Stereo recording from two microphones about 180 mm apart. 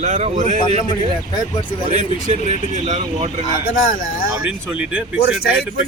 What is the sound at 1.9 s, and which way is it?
Speech, 45° right (ahead or behind).